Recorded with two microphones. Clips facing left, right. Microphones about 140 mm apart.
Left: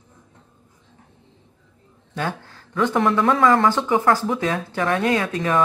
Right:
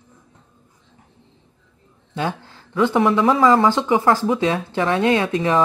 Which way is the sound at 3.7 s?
15° right (ahead or behind).